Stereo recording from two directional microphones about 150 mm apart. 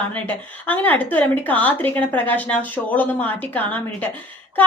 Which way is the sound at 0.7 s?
10° left (ahead or behind).